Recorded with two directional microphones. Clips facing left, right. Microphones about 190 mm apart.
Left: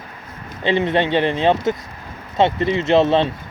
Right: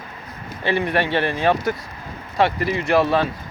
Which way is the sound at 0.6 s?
20° left (ahead or behind).